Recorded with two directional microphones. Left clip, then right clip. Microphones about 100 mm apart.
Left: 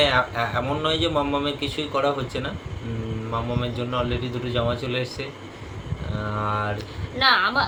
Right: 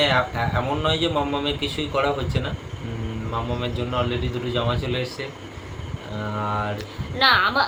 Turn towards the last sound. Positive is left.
turn(degrees=-25)  # may be behind; listen again after turning